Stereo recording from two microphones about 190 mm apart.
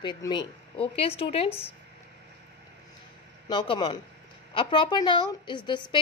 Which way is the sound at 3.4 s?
25° left (ahead or behind).